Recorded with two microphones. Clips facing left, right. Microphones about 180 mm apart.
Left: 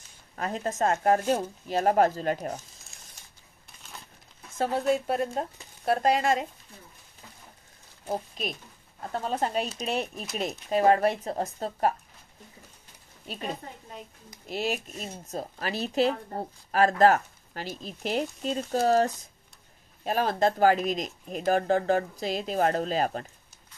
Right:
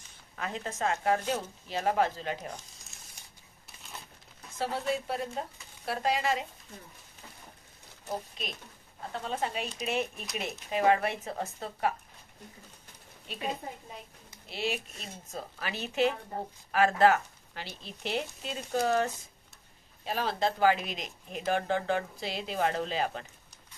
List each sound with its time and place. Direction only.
0.4 s speech: 45° left (ahead or behind)
4.6 s speech: 50° left (ahead or behind)
9.1 s speech: 40° left (ahead or behind)
14.5 s speech: 45° left (ahead or behind)